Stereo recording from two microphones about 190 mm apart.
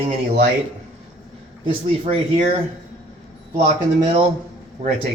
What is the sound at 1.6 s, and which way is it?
Speech, 30° right (ahead or behind).